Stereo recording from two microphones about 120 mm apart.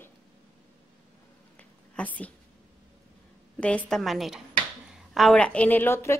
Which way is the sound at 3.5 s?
10° left (ahead or behind).